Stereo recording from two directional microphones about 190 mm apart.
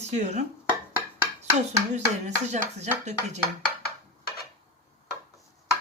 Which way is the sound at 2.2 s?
35° right (ahead or behind).